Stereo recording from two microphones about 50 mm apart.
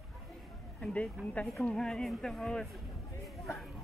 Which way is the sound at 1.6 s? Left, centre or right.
Centre.